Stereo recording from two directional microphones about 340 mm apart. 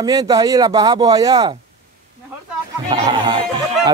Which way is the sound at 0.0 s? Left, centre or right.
Centre.